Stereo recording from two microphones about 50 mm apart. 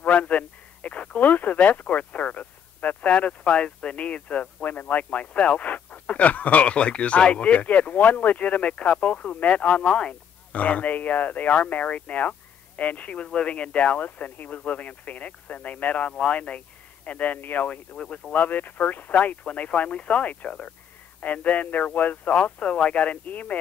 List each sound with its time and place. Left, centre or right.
0.0 s speech: left